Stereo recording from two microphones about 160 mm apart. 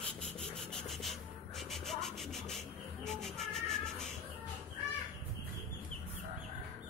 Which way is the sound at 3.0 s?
5° left (ahead or behind).